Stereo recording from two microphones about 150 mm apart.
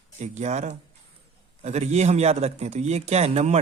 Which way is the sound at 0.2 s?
50° right (ahead or behind).